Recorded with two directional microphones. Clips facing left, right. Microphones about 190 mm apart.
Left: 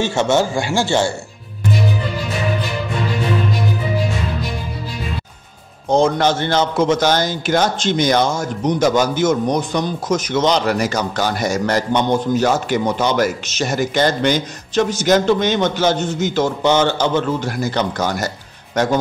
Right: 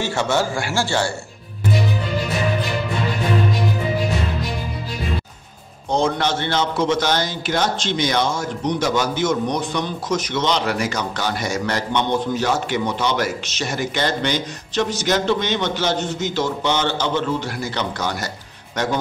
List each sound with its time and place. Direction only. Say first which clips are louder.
0.0 s speech: left 4 dB; 20° left (ahead or behind)
5.9 s a man's voice: left 5 dB; 45° left (ahead or behind)